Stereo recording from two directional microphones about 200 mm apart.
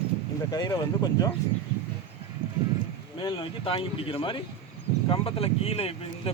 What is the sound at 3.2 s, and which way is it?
Speech, 25° left (ahead or behind).